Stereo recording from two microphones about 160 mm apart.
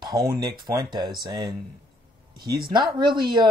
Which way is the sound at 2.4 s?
70° right (ahead or behind).